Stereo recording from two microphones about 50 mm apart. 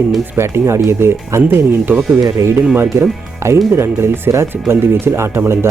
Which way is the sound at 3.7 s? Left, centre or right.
Right.